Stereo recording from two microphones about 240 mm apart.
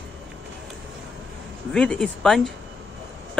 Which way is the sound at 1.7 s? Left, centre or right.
Centre.